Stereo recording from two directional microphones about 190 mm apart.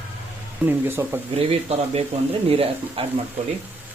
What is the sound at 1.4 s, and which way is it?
Speech, 30° right (ahead or behind).